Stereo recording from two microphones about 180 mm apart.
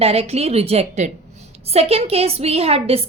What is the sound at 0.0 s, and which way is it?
Speech, 35° right (ahead or behind).